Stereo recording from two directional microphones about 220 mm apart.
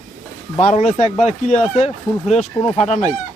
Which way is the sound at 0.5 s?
30° left (ahead or behind).